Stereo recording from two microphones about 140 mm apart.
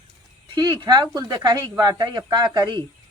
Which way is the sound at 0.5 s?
30° right (ahead or behind).